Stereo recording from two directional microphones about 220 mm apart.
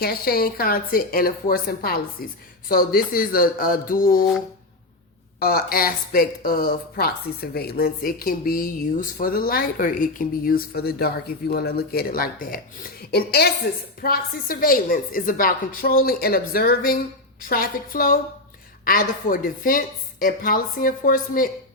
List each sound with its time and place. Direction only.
0.0 s a woman's voice: 45° left (ahead or behind)
5.4 s a woman's voice: 40° left (ahead or behind)